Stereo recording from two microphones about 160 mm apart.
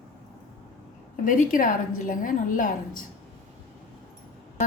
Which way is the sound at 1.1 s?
55° left (ahead or behind).